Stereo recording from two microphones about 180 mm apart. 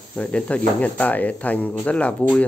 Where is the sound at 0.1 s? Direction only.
5° left (ahead or behind).